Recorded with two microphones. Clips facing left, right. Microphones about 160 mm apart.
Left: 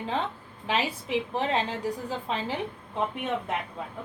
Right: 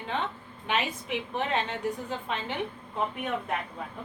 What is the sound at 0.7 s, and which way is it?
A woman's voice, 30° left (ahead or behind).